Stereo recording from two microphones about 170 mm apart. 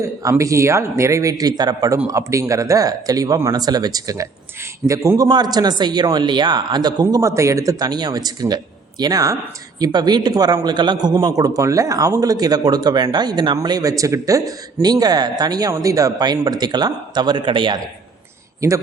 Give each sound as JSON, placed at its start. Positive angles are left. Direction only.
{"t": 0.0, "sound": "a man's voice", "side_deg": -20}